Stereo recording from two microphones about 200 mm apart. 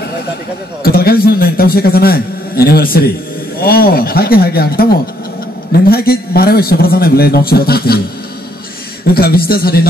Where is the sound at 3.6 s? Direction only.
50° left (ahead or behind).